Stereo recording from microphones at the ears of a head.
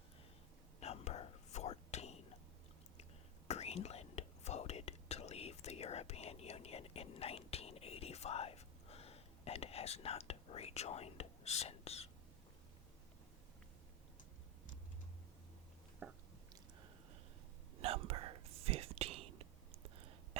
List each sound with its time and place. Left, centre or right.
0.8 s whispering: left
17.7 s whispering: right